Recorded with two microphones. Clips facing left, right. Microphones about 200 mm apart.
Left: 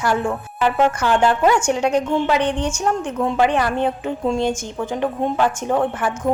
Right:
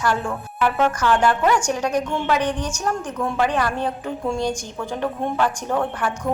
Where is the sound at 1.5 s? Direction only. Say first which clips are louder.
Left 3 dB; 25° left (ahead or behind).